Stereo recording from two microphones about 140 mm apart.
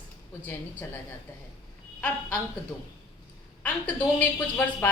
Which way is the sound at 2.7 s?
10° left (ahead or behind).